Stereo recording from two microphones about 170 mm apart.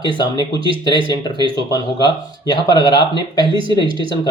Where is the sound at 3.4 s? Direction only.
30° right (ahead or behind).